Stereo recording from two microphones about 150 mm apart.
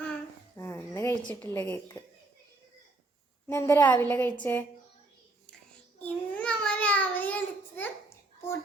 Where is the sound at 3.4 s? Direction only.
20° left (ahead or behind).